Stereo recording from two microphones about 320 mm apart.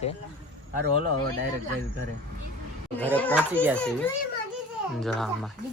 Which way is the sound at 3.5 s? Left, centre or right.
Centre.